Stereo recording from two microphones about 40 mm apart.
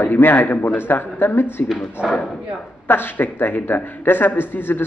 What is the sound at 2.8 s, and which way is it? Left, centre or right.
A man's voice, left.